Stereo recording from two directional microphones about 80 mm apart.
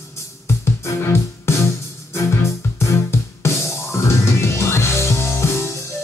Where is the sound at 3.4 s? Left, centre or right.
Left.